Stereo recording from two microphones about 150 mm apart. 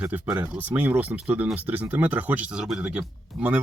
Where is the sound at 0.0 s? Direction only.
10° right (ahead or behind).